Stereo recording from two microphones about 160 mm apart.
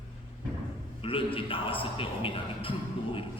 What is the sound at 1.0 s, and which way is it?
A man's voice, 35° left (ahead or behind).